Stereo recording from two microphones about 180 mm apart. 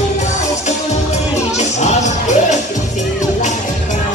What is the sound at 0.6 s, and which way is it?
Music, 40° left (ahead or behind).